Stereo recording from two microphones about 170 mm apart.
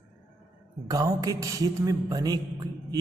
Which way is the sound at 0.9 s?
20° right (ahead or behind).